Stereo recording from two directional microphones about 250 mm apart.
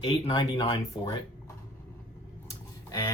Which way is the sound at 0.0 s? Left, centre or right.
Centre.